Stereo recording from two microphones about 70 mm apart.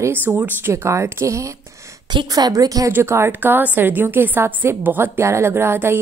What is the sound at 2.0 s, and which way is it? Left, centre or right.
Speech, right.